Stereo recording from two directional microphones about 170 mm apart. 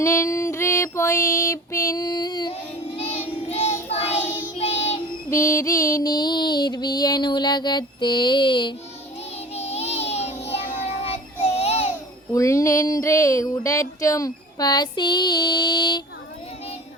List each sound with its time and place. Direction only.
0.0 s female singing: 15° left (ahead or behind)
3.5 s child singing: 40° left (ahead or behind)
5.3 s music: 15° left (ahead or behind)
9.6 s child singing: 40° left (ahead or behind)
11.5 s a sound: 35° left (ahead or behind)
12.3 s a sound: 20° left (ahead or behind)